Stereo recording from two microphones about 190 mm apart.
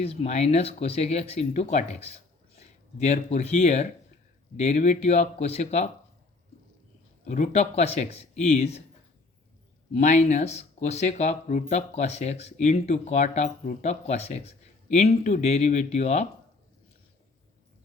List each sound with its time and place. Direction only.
0.0 s speech: 30° left (ahead or behind)
7.3 s speech: 40° left (ahead or behind)
9.9 s speech: 40° left (ahead or behind)